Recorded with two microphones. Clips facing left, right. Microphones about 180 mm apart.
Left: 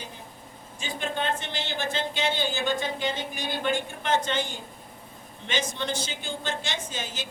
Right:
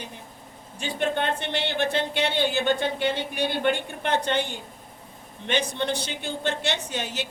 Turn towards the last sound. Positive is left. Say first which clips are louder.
# right 4 dB
turn(degrees=-65)  # may be behind; listen again after turning